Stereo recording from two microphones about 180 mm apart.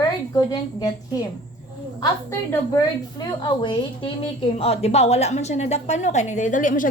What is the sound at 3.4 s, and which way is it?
A woman's voice, 25° left (ahead or behind).